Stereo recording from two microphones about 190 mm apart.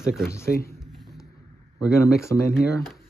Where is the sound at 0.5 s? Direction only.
55° left (ahead or behind).